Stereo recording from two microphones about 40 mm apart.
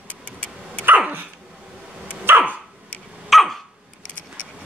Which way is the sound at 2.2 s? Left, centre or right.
Right.